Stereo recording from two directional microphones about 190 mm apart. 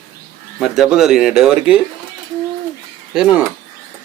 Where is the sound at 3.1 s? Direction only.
5° right (ahead or behind).